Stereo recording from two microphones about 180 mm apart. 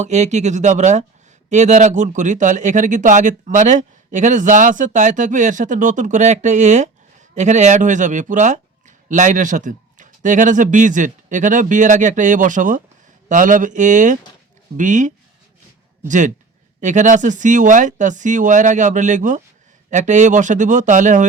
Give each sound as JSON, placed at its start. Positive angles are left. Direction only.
{"t": 0.0, "sound": "speech", "side_deg": -40}